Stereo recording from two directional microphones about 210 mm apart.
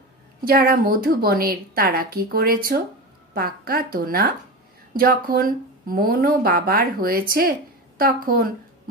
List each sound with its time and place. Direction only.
0.5 s speech: 45° right (ahead or behind)